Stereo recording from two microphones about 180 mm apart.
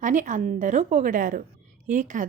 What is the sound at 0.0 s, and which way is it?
A woman's voice, 45° right (ahead or behind).